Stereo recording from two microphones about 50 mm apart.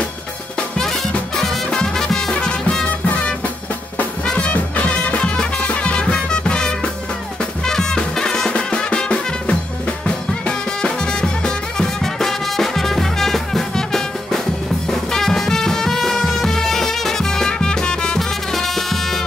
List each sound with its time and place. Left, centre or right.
0.6 s music: centre
4.3 s music: left; by 19.2 s centre